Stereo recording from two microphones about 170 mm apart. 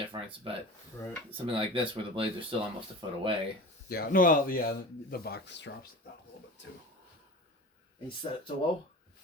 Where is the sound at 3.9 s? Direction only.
60° left (ahead or behind); by 6.8 s 90° left.